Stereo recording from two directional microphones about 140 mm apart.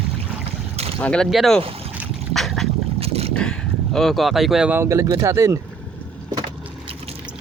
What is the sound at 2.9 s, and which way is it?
Boat, 45° right (ahead or behind).